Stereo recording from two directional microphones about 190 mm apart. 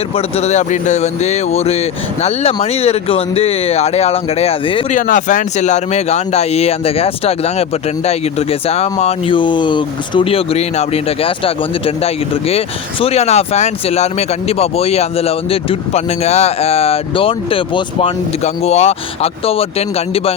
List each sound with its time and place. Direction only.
0.2 s speech: 35° left (ahead or behind)
4.9 s speech: 45° left (ahead or behind)